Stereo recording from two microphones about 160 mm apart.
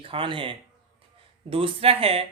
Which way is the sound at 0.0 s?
35° right (ahead or behind).